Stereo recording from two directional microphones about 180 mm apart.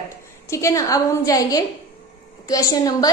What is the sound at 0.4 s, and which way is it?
A woman's voice, 15° left (ahead or behind).